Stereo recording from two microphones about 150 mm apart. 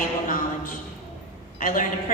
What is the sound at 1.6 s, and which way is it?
Speech, 65° left (ahead or behind).